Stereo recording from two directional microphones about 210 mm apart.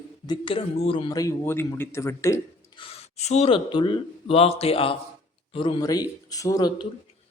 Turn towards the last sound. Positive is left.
turn(degrees=20)  # may be behind; listen again after turning